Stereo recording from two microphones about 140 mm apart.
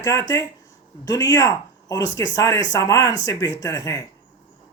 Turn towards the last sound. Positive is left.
turn(degrees=25)  # may be behind; listen again after turning